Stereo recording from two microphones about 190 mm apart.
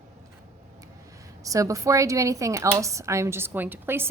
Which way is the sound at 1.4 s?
15° right (ahead or behind).